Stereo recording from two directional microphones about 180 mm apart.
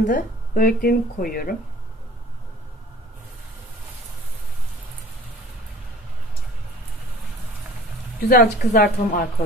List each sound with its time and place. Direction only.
0.0 s speech: 50° left (ahead or behind)
8.2 s a woman's voice: 55° left (ahead or behind)